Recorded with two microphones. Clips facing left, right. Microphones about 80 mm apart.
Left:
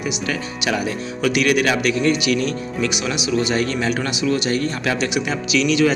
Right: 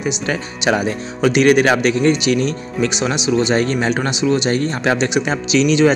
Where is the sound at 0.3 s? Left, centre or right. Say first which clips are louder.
Right 6 dB; right.